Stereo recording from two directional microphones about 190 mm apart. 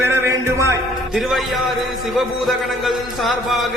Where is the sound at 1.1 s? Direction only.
Centre (ahead or behind).